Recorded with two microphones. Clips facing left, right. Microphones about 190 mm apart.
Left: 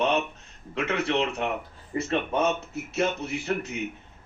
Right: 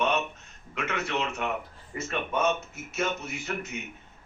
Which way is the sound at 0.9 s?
35° left (ahead or behind).